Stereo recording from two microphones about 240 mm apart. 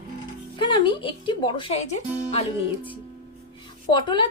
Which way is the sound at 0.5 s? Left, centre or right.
Centre.